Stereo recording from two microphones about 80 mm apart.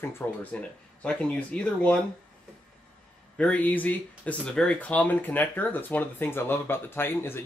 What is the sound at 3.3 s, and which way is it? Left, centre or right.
Speech, centre.